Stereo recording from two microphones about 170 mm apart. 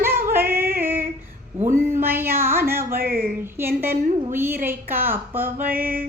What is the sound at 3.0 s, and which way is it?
Mantra, 55° right (ahead or behind).